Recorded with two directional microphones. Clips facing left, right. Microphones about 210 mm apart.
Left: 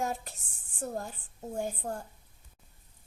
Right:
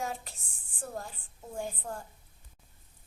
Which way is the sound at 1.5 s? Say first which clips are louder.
Left 3 dB; 40° left (ahead or behind).